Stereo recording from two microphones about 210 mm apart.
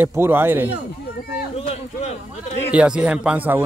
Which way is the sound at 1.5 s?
30° left (ahead or behind).